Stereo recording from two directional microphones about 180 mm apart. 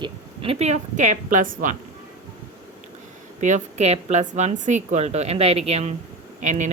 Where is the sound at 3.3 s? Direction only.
40° right (ahead or behind).